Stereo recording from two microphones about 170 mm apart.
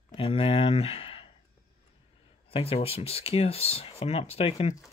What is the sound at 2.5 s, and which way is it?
Speech, 35° left (ahead or behind).